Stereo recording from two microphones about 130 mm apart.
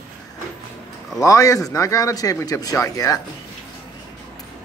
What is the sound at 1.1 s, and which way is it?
A man's voice, 25° left (ahead or behind).